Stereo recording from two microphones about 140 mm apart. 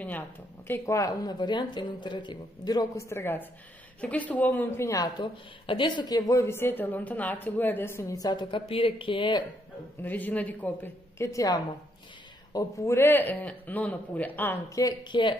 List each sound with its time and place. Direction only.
0.7 s speech: 20° left (ahead or behind); by 9.4 s 35° left (ahead or behind)
10.0 s a man's voice: 10° left (ahead or behind)
14.8 s speech: 30° left (ahead or behind)